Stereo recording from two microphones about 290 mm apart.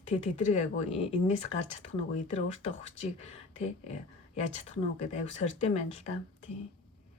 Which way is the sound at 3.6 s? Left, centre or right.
Left.